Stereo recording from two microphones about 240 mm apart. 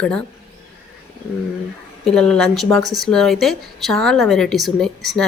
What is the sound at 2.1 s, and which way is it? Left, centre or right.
Speech, centre.